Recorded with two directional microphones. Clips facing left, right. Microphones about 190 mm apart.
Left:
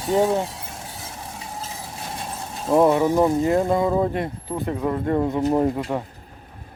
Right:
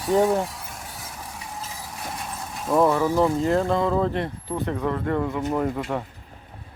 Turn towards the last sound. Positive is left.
turn(degrees=10)  # may be behind; listen again after turning